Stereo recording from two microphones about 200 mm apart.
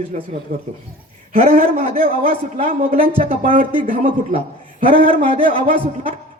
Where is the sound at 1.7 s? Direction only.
30° right (ahead or behind).